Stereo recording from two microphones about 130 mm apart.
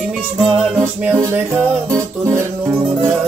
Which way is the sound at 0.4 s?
Centre (ahead or behind).